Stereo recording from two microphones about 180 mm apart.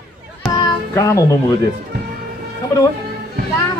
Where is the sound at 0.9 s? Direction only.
15° left (ahead or behind).